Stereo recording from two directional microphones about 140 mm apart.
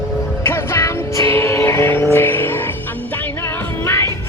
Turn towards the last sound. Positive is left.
turn(degrees=20)  # may be behind; listen again after turning